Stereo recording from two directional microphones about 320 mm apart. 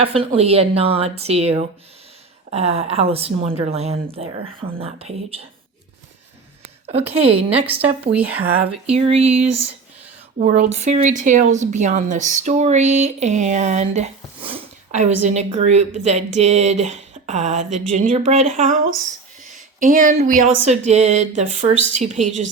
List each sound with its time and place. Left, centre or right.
0.0 s a woman's voice: centre
6.8 s a woman's voice: centre
8.1 s speech: centre
8.9 s a woman's voice: centre